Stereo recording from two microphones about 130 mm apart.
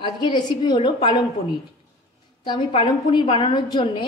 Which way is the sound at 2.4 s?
35° left (ahead or behind).